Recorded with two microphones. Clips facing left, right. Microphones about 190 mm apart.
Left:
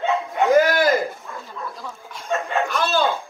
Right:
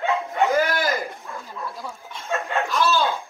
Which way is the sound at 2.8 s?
60° left (ahead or behind).